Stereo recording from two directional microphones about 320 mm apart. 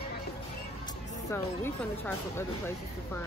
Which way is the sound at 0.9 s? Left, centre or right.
Left.